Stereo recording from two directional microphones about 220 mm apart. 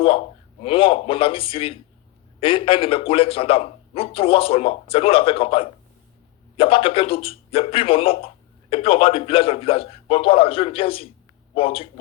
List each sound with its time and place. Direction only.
0.6 s a man's voice: 25° left (ahead or behind)